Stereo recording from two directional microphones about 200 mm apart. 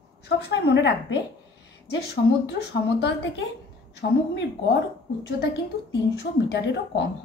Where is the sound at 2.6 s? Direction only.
55° left (ahead or behind).